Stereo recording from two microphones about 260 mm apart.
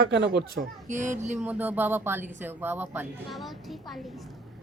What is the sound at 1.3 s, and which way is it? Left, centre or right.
Speech, centre.